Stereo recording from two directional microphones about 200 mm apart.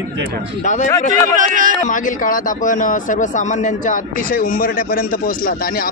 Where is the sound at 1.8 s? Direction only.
40° left (ahead or behind).